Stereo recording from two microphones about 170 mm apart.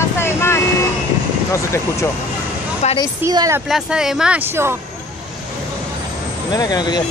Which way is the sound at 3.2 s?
20° right (ahead or behind).